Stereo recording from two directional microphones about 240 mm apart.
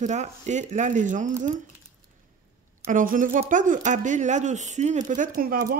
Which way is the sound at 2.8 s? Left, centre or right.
Right.